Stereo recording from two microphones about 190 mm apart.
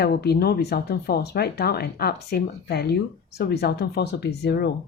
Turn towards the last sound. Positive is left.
turn(degrees=60)  # may be behind; listen again after turning